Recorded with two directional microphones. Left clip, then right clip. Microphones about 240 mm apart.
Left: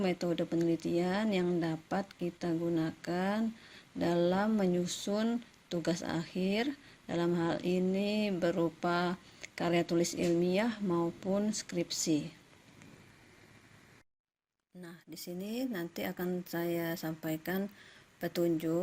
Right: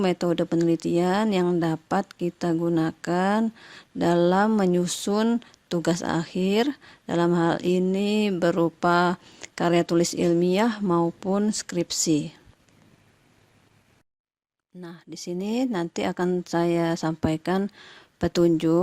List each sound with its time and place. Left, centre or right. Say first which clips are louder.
0.0 s speech: right 9 dB; right
14.8 s speech: right 9 dB; right